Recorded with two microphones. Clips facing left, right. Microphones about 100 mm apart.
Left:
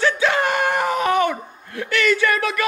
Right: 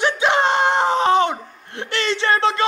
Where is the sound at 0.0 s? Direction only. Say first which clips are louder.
Right 1 dB; 20° right (ahead or behind).